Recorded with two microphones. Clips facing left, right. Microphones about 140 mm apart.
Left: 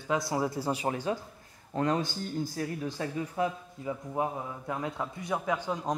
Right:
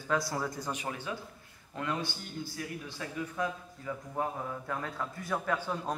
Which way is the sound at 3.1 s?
30° left (ahead or behind).